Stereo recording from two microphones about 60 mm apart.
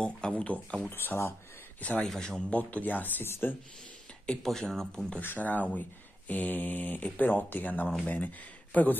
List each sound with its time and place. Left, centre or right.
0.2 s a sound: centre
0.8 s speech: left
1.8 s speech: left
2.0 s speech: centre
2.5 s speech: left
4.4 s speech: centre
5.2 s speech: left